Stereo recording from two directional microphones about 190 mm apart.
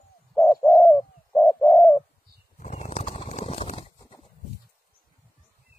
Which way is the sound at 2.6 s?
35° left (ahead or behind).